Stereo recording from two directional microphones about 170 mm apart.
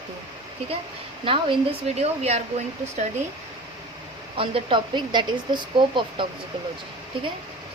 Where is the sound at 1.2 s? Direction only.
30° right (ahead or behind).